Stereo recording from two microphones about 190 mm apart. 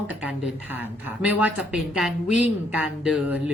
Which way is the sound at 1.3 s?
10° right (ahead or behind).